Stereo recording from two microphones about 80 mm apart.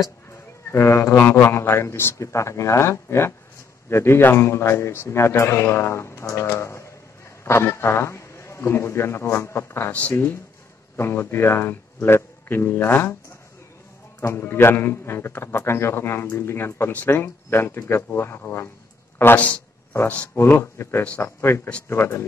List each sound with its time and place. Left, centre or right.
0.7 s a man's voice: left
14.2 s a man's voice: left
20.3 s a man's voice: left